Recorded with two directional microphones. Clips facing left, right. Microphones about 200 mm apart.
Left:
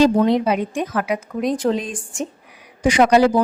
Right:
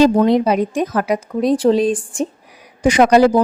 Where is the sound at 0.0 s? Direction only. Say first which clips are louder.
Right 3 dB; 45° right (ahead or behind).